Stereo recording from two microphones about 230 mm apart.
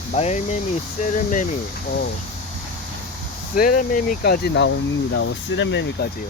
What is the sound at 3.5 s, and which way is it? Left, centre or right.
Speech, left.